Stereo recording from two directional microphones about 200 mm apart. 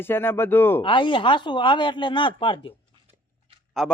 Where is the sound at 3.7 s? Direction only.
Centre (ahead or behind).